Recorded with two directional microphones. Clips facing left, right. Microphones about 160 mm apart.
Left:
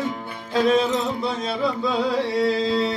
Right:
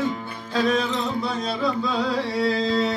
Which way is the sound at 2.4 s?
25° left (ahead or behind).